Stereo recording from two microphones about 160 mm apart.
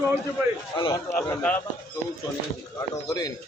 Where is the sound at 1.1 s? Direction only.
10° left (ahead or behind).